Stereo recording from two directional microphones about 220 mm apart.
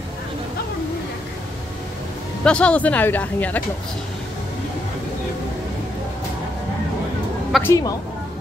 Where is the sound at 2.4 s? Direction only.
5° left (ahead or behind).